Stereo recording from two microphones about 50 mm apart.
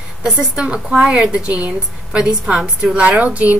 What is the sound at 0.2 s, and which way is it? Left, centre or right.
A woman's voice, centre.